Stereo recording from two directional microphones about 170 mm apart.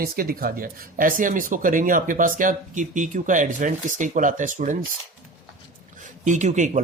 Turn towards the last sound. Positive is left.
turn(degrees=-45)  # may be behind; listen again after turning